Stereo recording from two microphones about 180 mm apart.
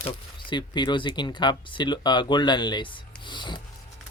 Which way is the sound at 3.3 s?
25° left (ahead or behind).